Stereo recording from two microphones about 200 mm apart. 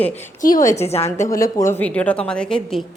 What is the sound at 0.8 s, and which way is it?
Speech, 30° left (ahead or behind).